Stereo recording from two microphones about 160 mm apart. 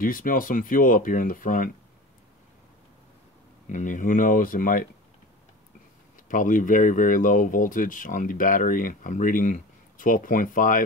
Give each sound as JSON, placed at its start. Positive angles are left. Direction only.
{"t": 0.0, "sound": "speech", "side_deg": 60}
{"t": 3.6, "sound": "speech", "side_deg": 55}
{"t": 6.2, "sound": "speech", "side_deg": 55}